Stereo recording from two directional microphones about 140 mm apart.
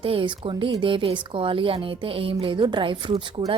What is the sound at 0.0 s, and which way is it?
A woman's voice, 40° right (ahead or behind).